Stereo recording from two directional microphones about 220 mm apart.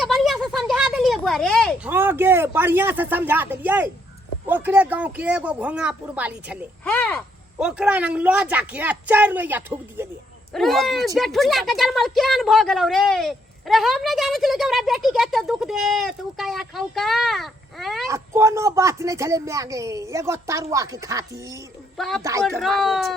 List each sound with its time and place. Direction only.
0.0 s a sound: centre (ahead or behind)
1.9 s speech: 10° right (ahead or behind)
6.8 s speech: 10° left (ahead or behind)
7.6 s a woman's voice: 5° right (ahead or behind)
18.1 s speech: 15° right (ahead or behind)
21.9 s a man's voice: centre (ahead or behind)
22.2 s speech: 15° right (ahead or behind)
22.4 s a woman's voice: centre (ahead or behind)